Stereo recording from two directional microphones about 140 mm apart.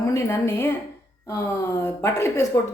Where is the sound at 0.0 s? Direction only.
20° left (ahead or behind).